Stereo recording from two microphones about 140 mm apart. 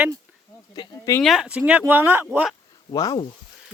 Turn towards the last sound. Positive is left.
turn(degrees=25)  # may be behind; listen again after turning